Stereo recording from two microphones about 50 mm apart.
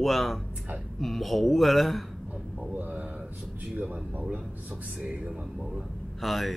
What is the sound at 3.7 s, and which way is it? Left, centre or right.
Speech, right.